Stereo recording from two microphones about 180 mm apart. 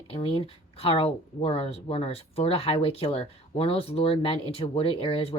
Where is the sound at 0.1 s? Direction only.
30° left (ahead or behind).